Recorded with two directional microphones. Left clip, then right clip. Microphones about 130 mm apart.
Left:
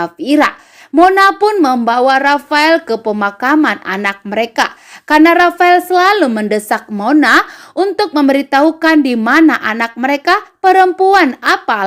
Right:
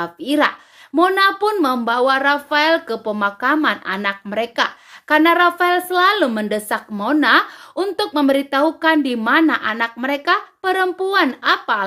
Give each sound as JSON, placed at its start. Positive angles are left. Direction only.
{"t": 0.0, "sound": "a woman's voice", "side_deg": 35}